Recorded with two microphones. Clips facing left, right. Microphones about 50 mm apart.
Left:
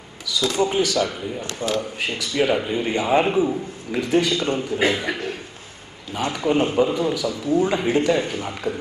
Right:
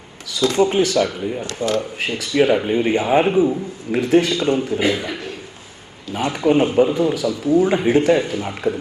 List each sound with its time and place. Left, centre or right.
0.3 s speech: right
3.1 s a man's voice: centre
3.9 s speech: right
4.8 s a man's voice: left
6.1 s speech: right
7.6 s speech: centre